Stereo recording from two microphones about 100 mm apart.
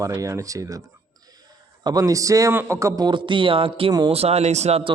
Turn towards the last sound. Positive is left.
turn(degrees=-85)